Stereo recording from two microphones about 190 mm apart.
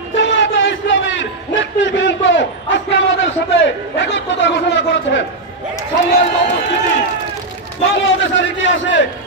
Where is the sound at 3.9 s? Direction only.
70° left (ahead or behind).